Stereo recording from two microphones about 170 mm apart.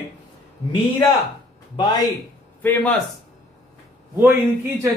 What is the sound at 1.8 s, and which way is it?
Speech, 25° left (ahead or behind).